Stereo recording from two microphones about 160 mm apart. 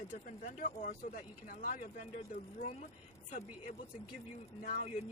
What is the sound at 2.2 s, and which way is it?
Speech, 45° left (ahead or behind).